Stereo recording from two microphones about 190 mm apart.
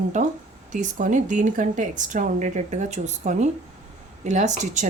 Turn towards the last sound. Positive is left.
turn(degrees=-40)  # may be behind; listen again after turning